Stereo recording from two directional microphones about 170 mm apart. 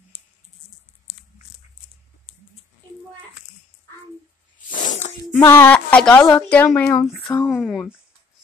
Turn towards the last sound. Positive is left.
turn(degrees=0)  # may be behind; listen again after turning